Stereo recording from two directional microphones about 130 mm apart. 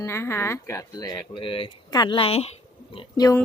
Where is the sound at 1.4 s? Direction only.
45° left (ahead or behind).